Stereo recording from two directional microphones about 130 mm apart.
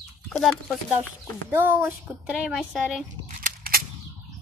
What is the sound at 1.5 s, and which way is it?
Speech, 15° right (ahead or behind).